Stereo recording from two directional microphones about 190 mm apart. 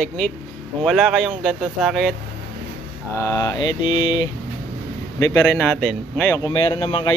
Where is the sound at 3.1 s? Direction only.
15° left (ahead or behind).